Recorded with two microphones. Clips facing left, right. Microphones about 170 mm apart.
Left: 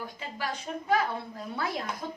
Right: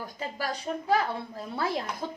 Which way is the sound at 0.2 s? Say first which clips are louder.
Right 5 dB; 40° right (ahead or behind).